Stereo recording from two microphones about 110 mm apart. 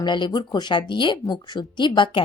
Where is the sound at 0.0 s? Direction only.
45° left (ahead or behind).